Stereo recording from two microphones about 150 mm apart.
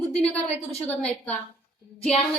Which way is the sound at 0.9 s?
10° left (ahead or behind).